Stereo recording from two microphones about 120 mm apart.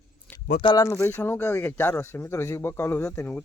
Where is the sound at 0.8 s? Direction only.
20° left (ahead or behind).